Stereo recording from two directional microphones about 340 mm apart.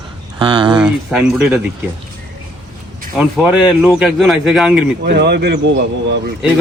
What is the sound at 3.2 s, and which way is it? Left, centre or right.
A man's voice, centre.